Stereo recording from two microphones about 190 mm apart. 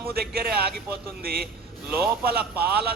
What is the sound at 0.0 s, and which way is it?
A man's voice, 55° right (ahead or behind).